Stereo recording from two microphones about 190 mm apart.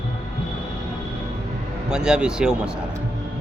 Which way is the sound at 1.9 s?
5° right (ahead or behind).